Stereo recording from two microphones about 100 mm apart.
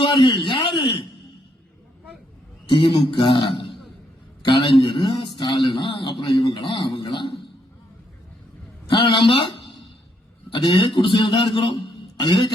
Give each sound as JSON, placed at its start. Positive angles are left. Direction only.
{"t": 0.0, "sound": "a sound", "side_deg": 55}
{"t": 2.6, "sound": "a man's voice", "side_deg": 60}
{"t": 8.9, "sound": "a man's voice", "side_deg": 55}
{"t": 10.5, "sound": "a man's voice", "side_deg": 55}